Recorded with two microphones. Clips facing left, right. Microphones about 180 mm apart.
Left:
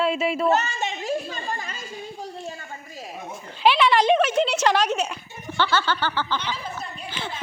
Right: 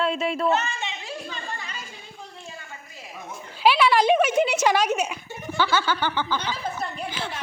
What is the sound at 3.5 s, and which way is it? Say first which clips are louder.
A woman's voice: even; 5° right (ahead or behind).